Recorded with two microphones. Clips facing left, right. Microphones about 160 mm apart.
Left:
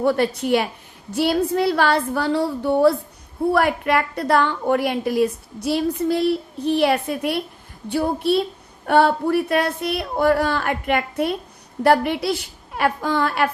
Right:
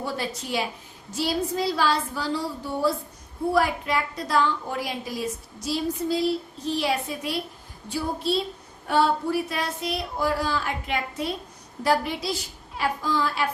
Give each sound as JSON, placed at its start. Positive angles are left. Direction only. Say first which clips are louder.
{"t": 0.0, "sound": "a woman's voice", "louder": "left 11 dB", "side_deg": 60}